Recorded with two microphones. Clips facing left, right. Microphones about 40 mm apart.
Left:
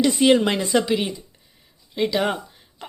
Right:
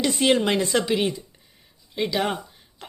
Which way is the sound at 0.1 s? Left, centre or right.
Centre.